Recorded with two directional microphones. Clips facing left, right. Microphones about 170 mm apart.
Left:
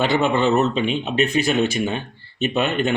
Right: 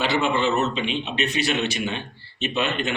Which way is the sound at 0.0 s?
45° left (ahead or behind).